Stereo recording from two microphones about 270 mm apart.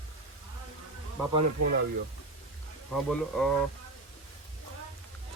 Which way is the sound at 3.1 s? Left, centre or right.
Centre.